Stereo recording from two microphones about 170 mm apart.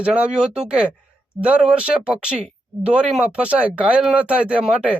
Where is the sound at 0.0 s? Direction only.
5° right (ahead or behind).